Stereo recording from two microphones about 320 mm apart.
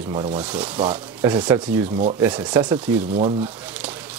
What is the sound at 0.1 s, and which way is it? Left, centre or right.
Speech, centre.